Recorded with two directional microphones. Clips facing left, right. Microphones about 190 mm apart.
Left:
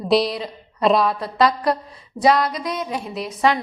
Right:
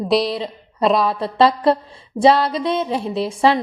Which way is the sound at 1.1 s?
30° right (ahead or behind).